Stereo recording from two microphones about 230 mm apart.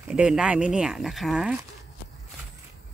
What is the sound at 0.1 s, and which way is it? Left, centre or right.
Speech, centre.